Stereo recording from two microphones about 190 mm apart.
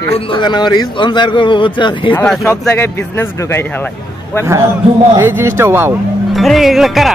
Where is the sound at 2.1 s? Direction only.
10° left (ahead or behind).